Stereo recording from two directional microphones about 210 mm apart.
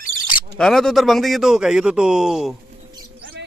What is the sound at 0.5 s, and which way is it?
A man's voice, centre (ahead or behind).